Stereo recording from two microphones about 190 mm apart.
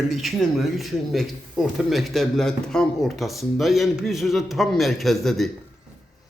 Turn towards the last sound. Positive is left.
turn(degrees=0)  # may be behind; listen again after turning